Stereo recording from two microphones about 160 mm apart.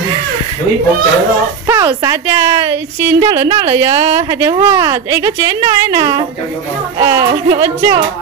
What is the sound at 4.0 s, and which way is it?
A woman's voice, 20° right (ahead or behind).